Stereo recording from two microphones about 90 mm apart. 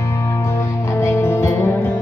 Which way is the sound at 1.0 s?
30° left (ahead or behind).